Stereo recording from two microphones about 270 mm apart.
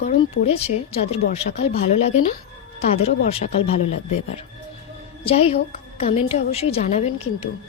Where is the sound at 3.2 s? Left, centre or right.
Left.